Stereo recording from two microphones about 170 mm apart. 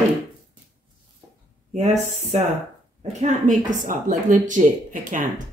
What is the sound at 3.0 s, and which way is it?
Speech, 40° right (ahead or behind).